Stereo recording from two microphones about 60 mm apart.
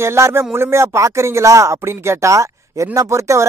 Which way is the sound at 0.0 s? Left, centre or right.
Right.